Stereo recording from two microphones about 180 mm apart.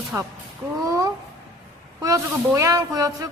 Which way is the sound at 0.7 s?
20° right (ahead or behind).